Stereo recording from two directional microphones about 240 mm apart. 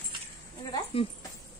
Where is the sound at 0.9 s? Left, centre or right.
Left.